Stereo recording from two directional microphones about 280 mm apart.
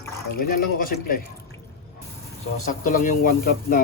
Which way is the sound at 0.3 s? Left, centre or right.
Left.